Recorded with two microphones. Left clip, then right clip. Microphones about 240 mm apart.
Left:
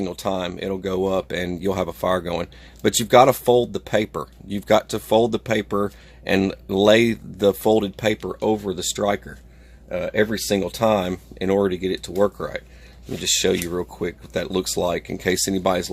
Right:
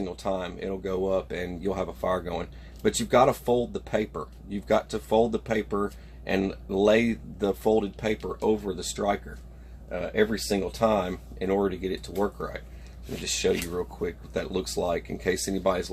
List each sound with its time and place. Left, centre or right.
0.0 s speech: left